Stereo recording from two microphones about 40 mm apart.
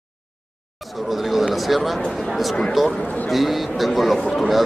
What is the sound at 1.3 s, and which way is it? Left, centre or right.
Speech, centre.